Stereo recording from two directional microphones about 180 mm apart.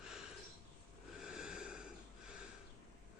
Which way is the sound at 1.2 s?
5° right (ahead or behind).